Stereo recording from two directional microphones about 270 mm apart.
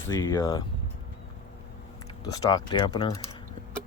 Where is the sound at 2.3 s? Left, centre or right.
Centre.